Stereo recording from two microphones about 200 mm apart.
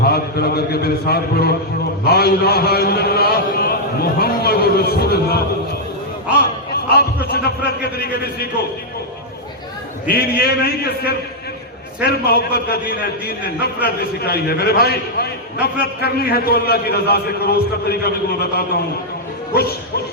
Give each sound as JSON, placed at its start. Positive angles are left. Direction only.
{"t": 0.0, "sound": "a man's voice", "side_deg": 50}
{"t": 6.7, "sound": "a man's voice", "side_deg": 50}
{"t": 10.1, "sound": "a man's voice", "side_deg": 50}
{"t": 13.8, "sound": "a man's voice", "side_deg": 50}